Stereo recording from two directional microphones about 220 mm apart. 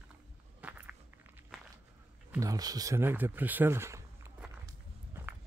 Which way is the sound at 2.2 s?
15° right (ahead or behind).